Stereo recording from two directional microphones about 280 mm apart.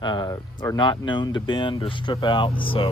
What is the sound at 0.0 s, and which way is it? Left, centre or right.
Speech, centre.